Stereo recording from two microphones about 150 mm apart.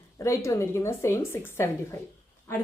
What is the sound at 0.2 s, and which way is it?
A woman's voice, 20° left (ahead or behind).